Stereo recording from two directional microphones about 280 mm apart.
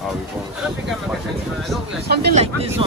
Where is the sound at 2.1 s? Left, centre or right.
Right.